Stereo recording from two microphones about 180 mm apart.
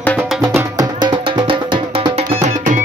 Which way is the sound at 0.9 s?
25° right (ahead or behind).